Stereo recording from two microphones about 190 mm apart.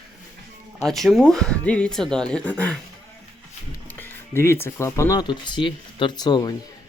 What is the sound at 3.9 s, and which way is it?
Speech, 10° left (ahead or behind).